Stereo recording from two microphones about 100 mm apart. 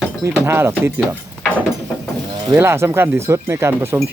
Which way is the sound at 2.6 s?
25° right (ahead or behind).